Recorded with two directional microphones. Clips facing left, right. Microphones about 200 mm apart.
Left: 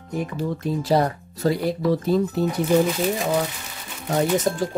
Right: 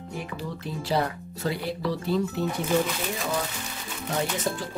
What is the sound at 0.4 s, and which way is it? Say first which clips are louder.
Speech: left 9 dB; 40° left (ahead or behind).